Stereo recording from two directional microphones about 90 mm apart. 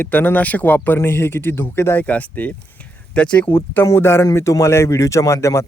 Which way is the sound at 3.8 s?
30° left (ahead or behind).